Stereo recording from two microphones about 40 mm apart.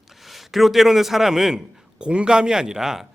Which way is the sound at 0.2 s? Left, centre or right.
Centre.